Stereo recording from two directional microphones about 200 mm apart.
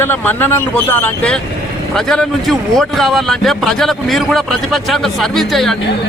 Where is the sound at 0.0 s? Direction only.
10° left (ahead or behind).